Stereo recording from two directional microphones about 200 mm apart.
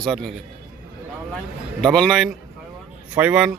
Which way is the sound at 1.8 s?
5° left (ahead or behind).